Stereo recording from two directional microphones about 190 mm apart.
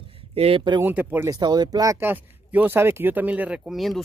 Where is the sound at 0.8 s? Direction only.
10° right (ahead or behind).